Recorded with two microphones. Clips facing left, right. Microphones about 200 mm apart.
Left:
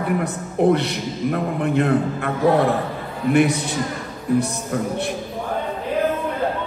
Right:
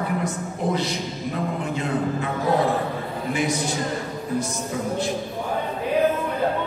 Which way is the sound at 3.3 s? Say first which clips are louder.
Left 8 dB; 65° left (ahead or behind).